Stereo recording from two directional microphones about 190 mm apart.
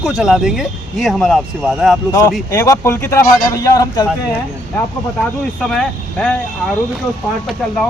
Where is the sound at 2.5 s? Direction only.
15° left (ahead or behind).